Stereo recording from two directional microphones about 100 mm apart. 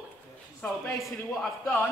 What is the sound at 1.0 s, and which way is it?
Speech, centre (ahead or behind).